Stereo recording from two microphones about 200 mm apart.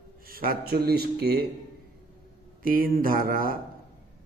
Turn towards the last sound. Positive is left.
turn(degrees=-45)  # may be behind; listen again after turning